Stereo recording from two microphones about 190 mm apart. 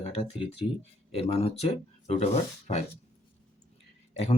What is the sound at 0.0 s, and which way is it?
Speech, 30° left (ahead or behind).